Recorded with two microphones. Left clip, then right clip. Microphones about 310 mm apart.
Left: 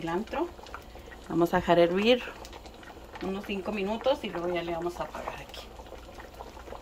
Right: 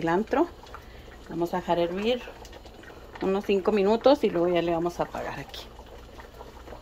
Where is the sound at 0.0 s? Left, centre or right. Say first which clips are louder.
Right 7 dB; centre.